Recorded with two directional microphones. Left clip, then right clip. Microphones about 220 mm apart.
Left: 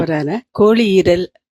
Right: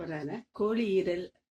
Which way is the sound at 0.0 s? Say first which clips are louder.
Left 19 dB; 50° left (ahead or behind).